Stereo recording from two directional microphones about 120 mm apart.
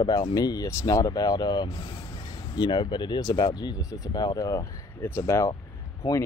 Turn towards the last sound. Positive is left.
turn(degrees=40)  # may be behind; listen again after turning